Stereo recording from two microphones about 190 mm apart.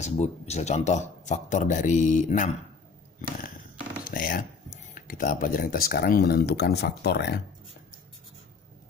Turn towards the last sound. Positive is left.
turn(degrees=60)  # may be behind; listen again after turning